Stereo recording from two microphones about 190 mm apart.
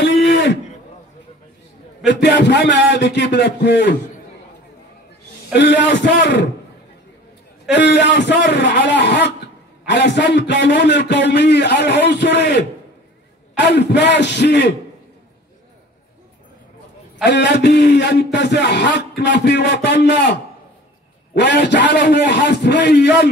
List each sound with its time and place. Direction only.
0.0 s a sound: 70° left (ahead or behind)
2.0 s a man's voice: 65° left (ahead or behind)
5.5 s a man's voice: 65° left (ahead or behind)
7.7 s a man's voice: 65° left (ahead or behind)
17.2 s a man's voice: 65° left (ahead or behind)
21.4 s a man's voice: 65° left (ahead or behind)